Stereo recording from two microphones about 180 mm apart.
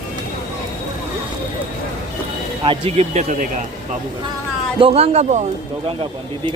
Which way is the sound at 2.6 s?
35° right (ahead or behind).